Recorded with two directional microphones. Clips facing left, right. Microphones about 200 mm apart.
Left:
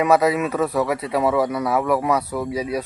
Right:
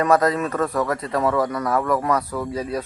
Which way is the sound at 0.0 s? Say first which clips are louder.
Left 1 dB; 10° left (ahead or behind).